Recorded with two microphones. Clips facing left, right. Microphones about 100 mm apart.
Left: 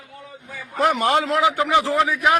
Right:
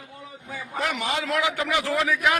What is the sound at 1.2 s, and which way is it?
A man's voice, 30° left (ahead or behind).